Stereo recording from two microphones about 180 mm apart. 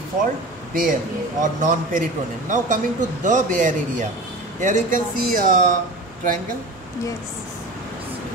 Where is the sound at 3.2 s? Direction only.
45° right (ahead or behind).